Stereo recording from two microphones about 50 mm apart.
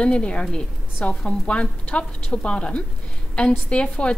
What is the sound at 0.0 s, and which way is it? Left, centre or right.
A woman's voice, left.